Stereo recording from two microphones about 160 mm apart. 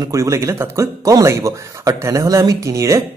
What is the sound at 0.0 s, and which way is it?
Speech, 20° right (ahead or behind).